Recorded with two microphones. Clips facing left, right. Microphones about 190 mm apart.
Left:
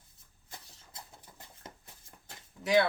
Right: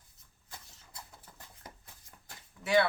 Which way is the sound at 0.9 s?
25° left (ahead or behind).